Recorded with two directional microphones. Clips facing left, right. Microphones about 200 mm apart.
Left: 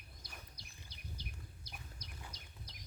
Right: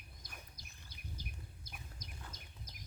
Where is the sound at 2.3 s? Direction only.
50° right (ahead or behind).